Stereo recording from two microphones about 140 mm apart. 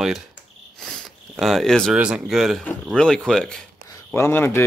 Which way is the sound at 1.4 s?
Centre (ahead or behind).